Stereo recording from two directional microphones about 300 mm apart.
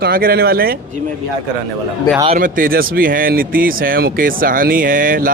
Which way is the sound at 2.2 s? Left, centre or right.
Right.